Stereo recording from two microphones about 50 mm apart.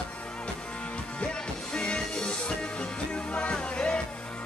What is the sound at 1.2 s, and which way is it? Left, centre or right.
Music, centre.